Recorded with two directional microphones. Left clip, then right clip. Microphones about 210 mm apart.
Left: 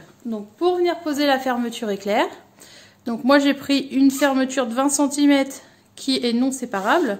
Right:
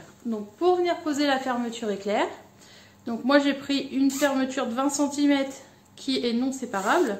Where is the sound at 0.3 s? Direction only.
45° left (ahead or behind).